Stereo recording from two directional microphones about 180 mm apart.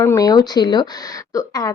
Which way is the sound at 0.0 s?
15° left (ahead or behind).